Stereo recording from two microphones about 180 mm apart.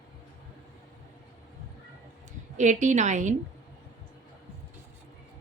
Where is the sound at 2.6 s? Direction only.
40° right (ahead or behind).